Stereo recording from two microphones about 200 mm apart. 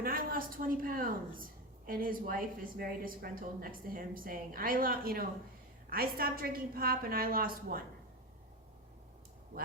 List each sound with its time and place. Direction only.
0.0 s a woman's voice: 45° right (ahead or behind)